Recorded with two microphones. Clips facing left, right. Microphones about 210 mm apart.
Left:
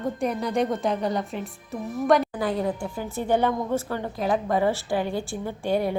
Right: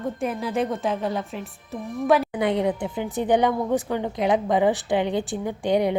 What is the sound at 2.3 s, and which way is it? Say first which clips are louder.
A woman's voice: right 3 dB; 20° right (ahead or behind).